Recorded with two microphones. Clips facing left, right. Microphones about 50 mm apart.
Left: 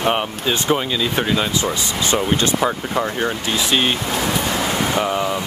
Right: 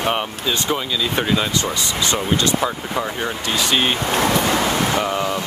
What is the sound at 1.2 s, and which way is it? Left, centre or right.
Speech, centre.